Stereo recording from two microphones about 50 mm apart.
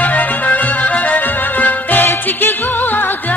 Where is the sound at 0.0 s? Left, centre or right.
Left.